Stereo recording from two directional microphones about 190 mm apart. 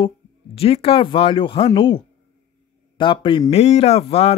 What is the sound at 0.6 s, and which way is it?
A man's voice, 30° left (ahead or behind).